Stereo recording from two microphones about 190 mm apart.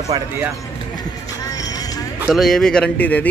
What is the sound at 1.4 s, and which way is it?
Music, 20° left (ahead or behind).